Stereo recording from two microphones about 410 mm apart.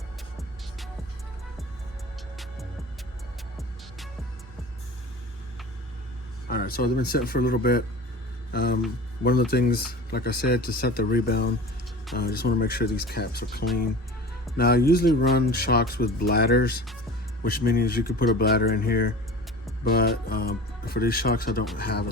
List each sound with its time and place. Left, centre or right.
6.5 s speech: left